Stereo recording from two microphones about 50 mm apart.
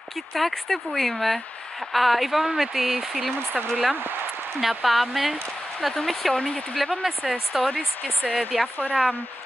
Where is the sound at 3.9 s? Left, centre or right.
Right.